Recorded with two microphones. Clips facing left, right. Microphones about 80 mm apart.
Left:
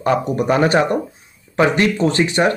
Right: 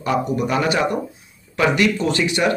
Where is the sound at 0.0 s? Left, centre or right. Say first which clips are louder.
Left 3 dB; left.